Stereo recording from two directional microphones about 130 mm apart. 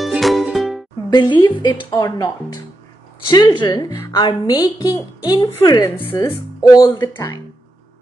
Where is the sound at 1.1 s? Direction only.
35° left (ahead or behind).